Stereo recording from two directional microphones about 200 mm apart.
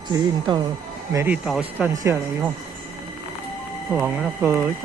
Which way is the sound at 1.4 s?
Centre (ahead or behind).